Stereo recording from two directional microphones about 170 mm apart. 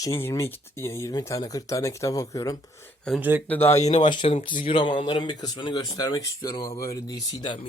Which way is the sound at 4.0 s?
25° left (ahead or behind).